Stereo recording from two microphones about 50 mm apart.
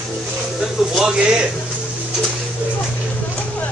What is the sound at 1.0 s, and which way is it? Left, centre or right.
Speech, centre.